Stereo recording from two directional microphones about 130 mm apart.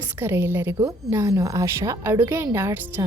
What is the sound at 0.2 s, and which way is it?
A woman's voice, 20° right (ahead or behind).